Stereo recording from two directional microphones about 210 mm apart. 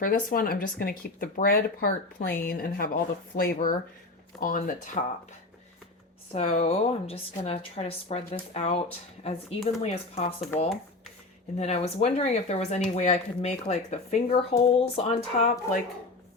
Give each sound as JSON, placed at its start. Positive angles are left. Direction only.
{"t": 0.0, "sound": "speech", "side_deg": 40}
{"t": 6.3, "sound": "a woman's voice", "side_deg": 30}
{"t": 11.5, "sound": "speech", "side_deg": 30}